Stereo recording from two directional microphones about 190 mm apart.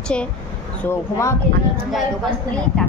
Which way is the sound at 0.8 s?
15° left (ahead or behind).